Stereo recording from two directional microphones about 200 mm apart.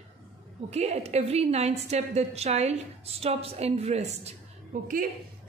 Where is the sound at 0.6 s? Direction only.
35° right (ahead or behind).